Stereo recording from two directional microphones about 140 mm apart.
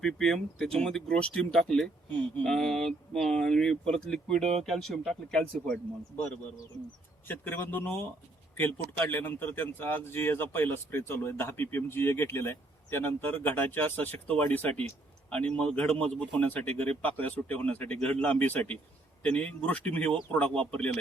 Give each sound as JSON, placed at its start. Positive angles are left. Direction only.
{"t": 0.0, "sound": "speech", "side_deg": 5}